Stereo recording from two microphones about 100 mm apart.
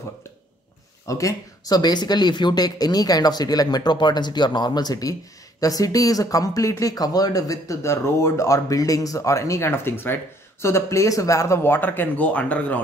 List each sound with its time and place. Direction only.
1.0 s speech: 35° left (ahead or behind); by 12.8 s 15° left (ahead or behind)